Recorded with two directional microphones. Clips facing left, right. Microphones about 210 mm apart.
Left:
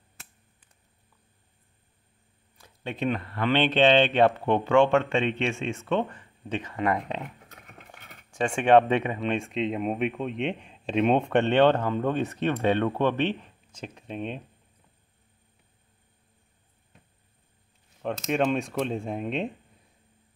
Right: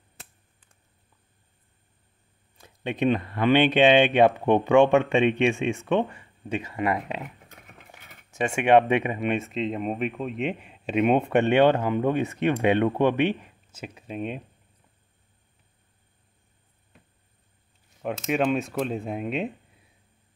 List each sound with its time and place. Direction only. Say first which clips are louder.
2.6 s speech: right 5 dB; 20° right (ahead or behind)
18.0 s speech: right 1 dB; 5° right (ahead or behind)